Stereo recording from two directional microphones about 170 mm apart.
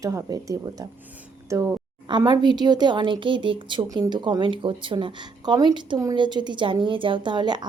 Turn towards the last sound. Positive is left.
turn(degrees=-25)  # may be behind; listen again after turning